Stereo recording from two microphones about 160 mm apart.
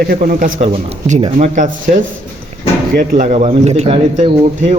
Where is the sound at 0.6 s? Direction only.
50° right (ahead or behind).